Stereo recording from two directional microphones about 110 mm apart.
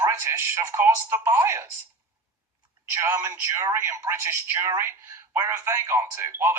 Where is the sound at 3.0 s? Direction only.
20° right (ahead or behind).